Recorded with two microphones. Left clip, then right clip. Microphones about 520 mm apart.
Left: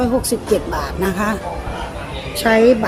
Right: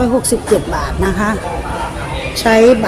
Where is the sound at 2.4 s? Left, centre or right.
Left.